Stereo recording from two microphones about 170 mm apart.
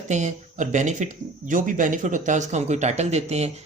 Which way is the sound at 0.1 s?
45° right (ahead or behind).